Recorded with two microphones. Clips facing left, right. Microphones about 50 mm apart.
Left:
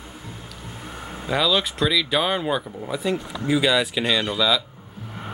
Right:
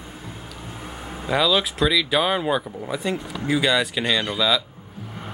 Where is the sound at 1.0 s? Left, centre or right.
Centre.